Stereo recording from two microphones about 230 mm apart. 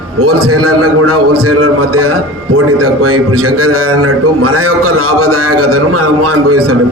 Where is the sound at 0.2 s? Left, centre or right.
Right.